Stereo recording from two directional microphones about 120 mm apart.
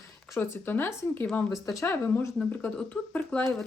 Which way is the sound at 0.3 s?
15° left (ahead or behind).